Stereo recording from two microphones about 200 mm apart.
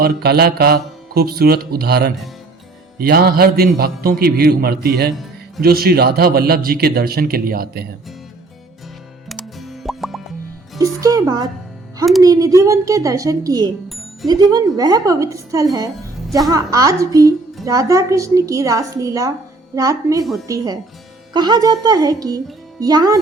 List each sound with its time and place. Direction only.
0.0 s a man's voice: 50° right (ahead or behind)
9.3 s music: centre (ahead or behind)
10.8 s music: 15° right (ahead or behind)
12.2 s a woman's voice: 15° right (ahead or behind)
13.9 s music: centre (ahead or behind)
14.3 s a woman's voice: 20° right (ahead or behind)